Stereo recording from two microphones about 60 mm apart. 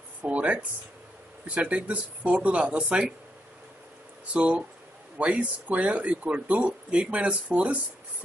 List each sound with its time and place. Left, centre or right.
0.2 s speech: right
4.3 s speech: centre